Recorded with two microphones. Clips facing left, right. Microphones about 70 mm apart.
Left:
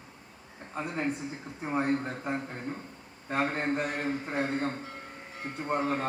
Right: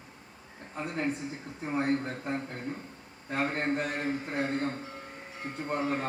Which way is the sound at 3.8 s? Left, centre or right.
Left.